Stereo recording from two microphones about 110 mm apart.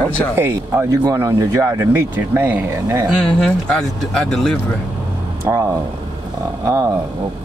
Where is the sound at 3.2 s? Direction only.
5° left (ahead or behind).